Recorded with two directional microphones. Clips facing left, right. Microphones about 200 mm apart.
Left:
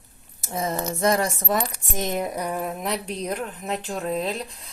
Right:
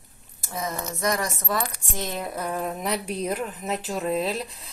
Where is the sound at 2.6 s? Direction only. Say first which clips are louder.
Even; centre (ahead or behind).